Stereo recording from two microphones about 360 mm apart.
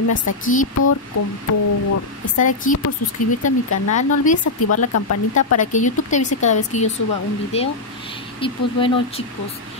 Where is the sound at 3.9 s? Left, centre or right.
Left.